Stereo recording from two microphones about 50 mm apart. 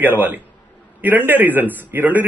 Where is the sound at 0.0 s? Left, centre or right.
Right.